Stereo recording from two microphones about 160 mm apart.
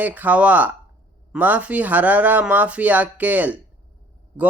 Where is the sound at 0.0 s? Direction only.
10° right (ahead or behind).